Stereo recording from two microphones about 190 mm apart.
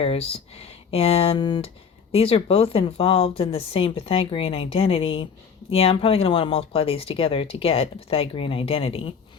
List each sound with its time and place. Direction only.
0.0 s speech: 30° left (ahead or behind)